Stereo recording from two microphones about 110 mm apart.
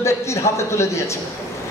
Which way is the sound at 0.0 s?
25° left (ahead or behind).